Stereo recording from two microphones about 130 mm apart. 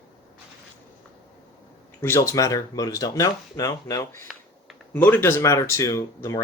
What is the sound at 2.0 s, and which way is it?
Speech, 25° left (ahead or behind).